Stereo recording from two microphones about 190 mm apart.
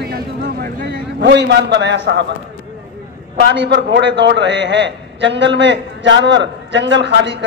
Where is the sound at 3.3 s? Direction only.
65° right (ahead or behind).